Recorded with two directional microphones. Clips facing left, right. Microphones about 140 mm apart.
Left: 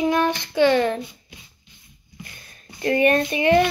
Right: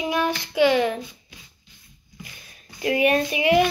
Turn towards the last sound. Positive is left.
turn(degrees=-10)  # may be behind; listen again after turning